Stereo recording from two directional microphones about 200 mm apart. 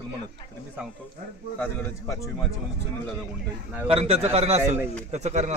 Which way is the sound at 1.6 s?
15° left (ahead or behind).